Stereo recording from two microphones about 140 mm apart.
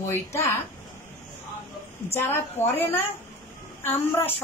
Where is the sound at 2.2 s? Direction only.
15° left (ahead or behind).